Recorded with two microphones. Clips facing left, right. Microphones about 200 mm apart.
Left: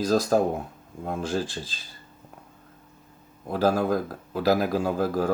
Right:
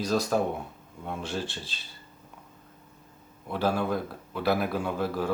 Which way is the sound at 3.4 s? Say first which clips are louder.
Left 4 dB; 40° left (ahead or behind).